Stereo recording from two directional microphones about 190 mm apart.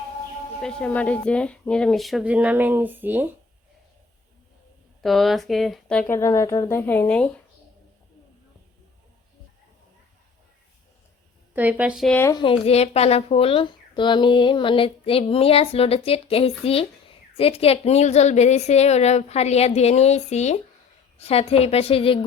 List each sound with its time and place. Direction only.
0.6 s speech: 5° left (ahead or behind); by 3.2 s 10° right (ahead or behind)
5.0 s speech: centre (ahead or behind)
11.5 s a woman's voice: 10° right (ahead or behind)
12.2 s speech: 20° left (ahead or behind)